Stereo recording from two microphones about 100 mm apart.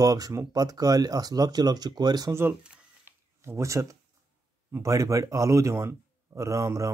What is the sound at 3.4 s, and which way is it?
A man's voice, 30° right (ahead or behind).